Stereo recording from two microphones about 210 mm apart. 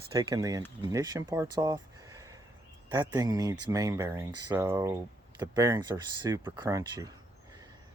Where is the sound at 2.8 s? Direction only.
20° right (ahead or behind).